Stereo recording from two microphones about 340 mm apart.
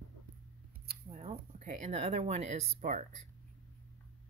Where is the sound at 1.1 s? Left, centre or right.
Centre.